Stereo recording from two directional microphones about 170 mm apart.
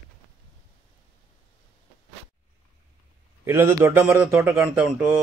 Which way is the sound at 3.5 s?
15° right (ahead or behind).